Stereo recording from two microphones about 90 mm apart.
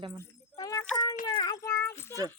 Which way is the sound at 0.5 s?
45° left (ahead or behind).